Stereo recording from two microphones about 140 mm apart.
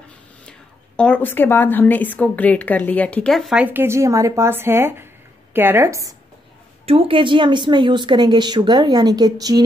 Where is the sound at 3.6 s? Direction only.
15° right (ahead or behind).